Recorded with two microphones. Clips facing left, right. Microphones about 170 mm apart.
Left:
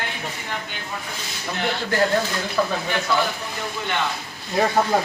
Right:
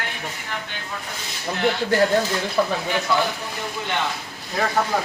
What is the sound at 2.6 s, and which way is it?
Speech, 20° right (ahead or behind).